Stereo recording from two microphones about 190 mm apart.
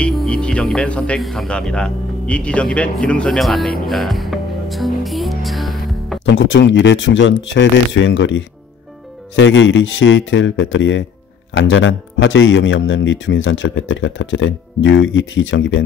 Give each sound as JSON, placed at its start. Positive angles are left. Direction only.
{"t": 0.0, "sound": "music", "side_deg": 5}
{"t": 6.2, "sound": "speech", "side_deg": 70}